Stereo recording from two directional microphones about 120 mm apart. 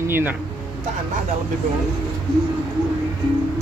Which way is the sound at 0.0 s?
15° right (ahead or behind).